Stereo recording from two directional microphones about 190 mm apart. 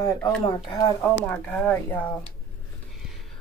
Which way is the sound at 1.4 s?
5° left (ahead or behind).